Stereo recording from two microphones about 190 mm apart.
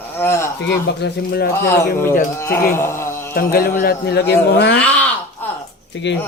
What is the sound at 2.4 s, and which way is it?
Speech, 15° left (ahead or behind).